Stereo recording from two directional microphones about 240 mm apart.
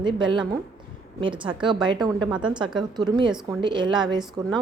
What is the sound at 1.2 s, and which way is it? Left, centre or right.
A woman's voice, right.